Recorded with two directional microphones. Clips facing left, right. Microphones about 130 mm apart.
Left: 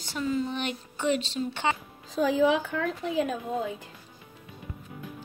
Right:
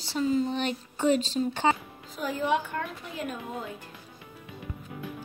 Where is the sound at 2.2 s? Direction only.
90° left.